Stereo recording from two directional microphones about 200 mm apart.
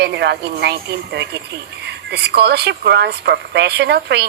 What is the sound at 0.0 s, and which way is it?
A woman's voice, 55° right (ahead or behind).